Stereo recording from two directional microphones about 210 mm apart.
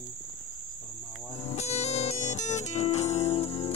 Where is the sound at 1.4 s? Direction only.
30° left (ahead or behind).